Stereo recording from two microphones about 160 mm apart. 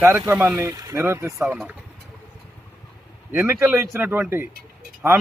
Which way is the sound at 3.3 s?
10° right (ahead or behind).